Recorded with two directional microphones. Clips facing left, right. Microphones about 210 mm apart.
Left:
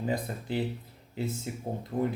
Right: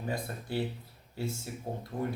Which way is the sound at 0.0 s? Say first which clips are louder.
Left 4 dB; 20° left (ahead or behind).